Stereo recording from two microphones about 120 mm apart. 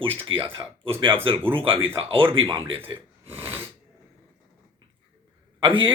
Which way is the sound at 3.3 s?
20° right (ahead or behind).